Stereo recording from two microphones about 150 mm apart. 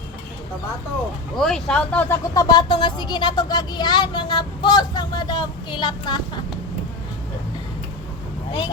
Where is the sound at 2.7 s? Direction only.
35° left (ahead or behind).